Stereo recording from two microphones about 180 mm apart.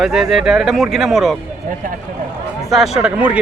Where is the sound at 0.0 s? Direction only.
Centre (ahead or behind).